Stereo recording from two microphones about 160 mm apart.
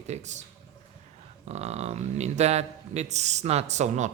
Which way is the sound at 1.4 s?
40° right (ahead or behind).